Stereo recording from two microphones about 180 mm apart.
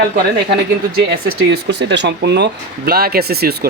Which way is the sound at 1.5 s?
75° right (ahead or behind).